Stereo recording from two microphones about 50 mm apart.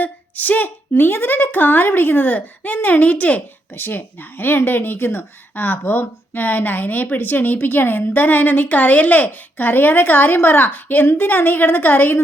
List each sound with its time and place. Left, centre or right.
0.0 s speech: left
3.8 s speech: left